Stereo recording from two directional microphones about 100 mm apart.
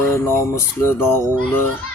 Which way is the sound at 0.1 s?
30° left (ahead or behind).